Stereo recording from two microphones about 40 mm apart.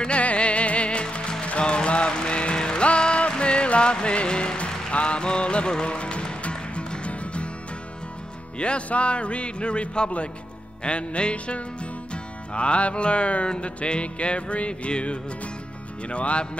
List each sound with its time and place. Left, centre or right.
0.0 s music: left
8.5 s music: left